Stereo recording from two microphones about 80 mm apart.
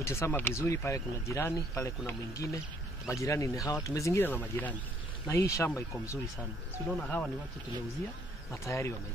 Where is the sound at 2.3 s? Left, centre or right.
Left.